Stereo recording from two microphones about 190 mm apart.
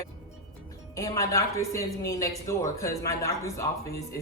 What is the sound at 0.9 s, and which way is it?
A woman's voice, 15° left (ahead or behind).